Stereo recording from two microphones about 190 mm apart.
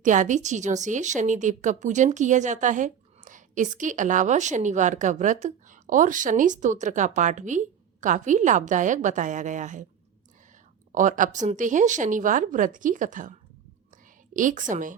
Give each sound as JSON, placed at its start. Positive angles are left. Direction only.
{"t": 0.0, "sound": "a woman's voice", "side_deg": -40}
{"t": 10.9, "sound": "speech", "side_deg": -45}
{"t": 14.3, "sound": "speech", "side_deg": -45}